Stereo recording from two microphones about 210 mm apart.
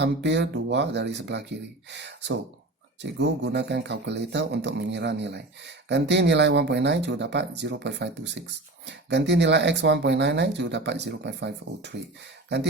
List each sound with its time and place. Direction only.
0.0 s speech: 55° right (ahead or behind)